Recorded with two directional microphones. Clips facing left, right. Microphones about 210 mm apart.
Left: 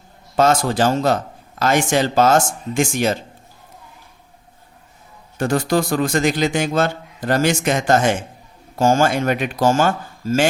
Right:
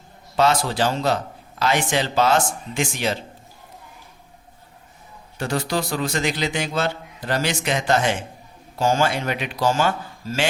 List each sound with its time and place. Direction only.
0.3 s a man's voice: 45° left (ahead or behind)
5.4 s a man's voice: 50° left (ahead or behind)